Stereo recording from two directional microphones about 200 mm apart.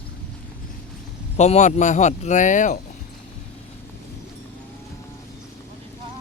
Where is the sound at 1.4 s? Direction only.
35° left (ahead or behind).